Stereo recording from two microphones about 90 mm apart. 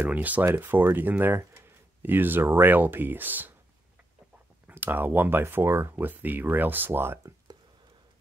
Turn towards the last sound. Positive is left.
turn(degrees=-25)  # may be behind; listen again after turning